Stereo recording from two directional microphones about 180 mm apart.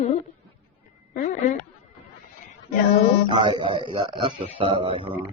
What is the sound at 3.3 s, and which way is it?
Speech, 25° right (ahead or behind).